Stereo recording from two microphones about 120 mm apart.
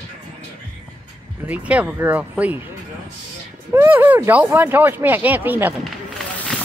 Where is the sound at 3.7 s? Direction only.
20° right (ahead or behind).